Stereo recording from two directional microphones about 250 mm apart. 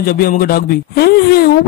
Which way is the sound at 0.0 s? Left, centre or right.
Left.